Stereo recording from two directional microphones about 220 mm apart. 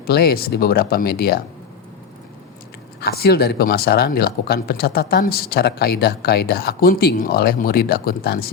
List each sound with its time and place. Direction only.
0.0 s speech: 45° left (ahead or behind)
3.0 s speech: 45° left (ahead or behind)